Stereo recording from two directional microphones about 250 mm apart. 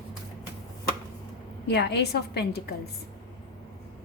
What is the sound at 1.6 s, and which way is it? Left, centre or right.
A woman's voice, left.